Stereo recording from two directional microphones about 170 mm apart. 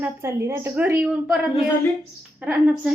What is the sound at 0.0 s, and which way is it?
A woman's voice, 15° right (ahead or behind).